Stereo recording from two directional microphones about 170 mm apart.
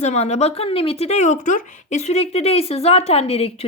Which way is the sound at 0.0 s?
40° left (ahead or behind).